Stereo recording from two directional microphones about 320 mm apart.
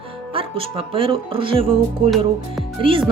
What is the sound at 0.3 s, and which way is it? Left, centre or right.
Speech, centre.